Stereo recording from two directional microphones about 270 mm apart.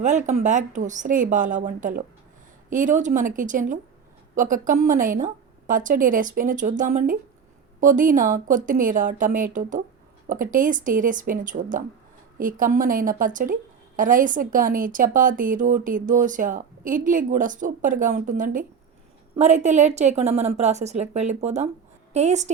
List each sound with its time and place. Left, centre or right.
0.0 s a woman's voice: right